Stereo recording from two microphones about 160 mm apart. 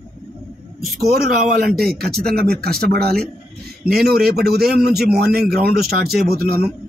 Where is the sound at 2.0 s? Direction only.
5° left (ahead or behind).